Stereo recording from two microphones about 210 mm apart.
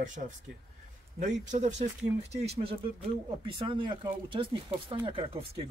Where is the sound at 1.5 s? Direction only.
35° right (ahead or behind).